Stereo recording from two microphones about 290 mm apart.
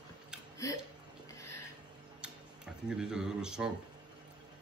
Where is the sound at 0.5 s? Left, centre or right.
Centre.